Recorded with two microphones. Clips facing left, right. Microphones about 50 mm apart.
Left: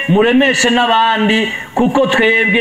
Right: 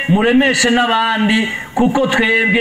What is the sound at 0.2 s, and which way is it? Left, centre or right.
A man's voice, left.